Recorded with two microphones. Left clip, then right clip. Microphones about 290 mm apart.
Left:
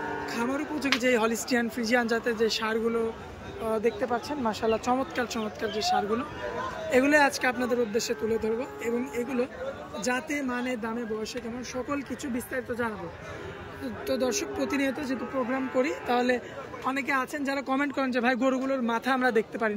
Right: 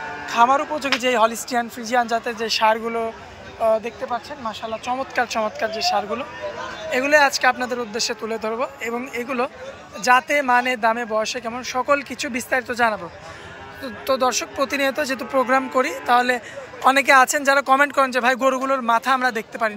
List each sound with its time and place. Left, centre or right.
0.3 s speech: centre
5.1 s speech: centre
10.8 s speech: right
11.2 s speech: centre
11.9 s speech: right
14.0 s speech: centre
15.0 s speech: right
15.8 s speech: centre
16.8 s speech: right
17.4 s speech: centre